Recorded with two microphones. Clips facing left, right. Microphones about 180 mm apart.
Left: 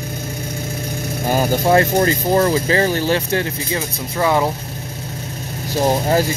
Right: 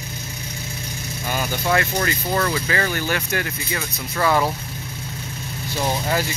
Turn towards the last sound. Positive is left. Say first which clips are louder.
# left 7 dB
turn(degrees=40)  # may be behind; listen again after turning